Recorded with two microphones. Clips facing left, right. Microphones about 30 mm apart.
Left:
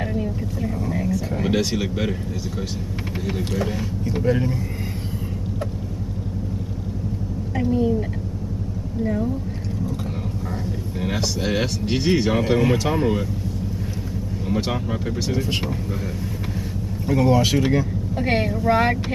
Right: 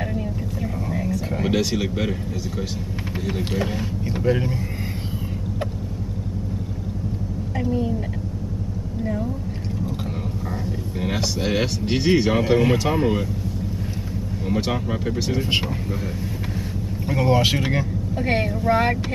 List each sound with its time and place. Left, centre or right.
0.0 s vehicle: centre
1.3 s speech: centre
3.5 s speech: centre
7.5 s a sound: centre
9.0 s speech: centre
11.0 s speech: centre
14.5 s speech: centre
17.1 s speech: centre
18.1 s a woman's voice: centre
18.7 s vehicle: centre